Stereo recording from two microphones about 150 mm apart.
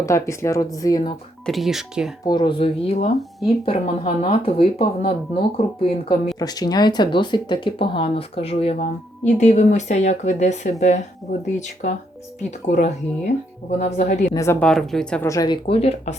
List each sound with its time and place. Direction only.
0.0 s speech: 20° left (ahead or behind)
1.5 s speech: centre (ahead or behind)
2.2 s speech: 30° left (ahead or behind)
6.4 s speech: 25° left (ahead or behind); by 8.7 s 40° left (ahead or behind)
8.8 s a woman's voice: 55° left (ahead or behind)
14.3 s speech: 20° left (ahead or behind)
14.6 s speech: 5° left (ahead or behind)
15.2 s speech: 20° left (ahead or behind)
15.6 s speech: 45° left (ahead or behind)